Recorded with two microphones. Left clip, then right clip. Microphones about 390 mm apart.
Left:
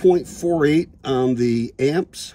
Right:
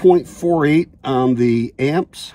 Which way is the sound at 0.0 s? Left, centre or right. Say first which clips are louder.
Right 4 dB; centre.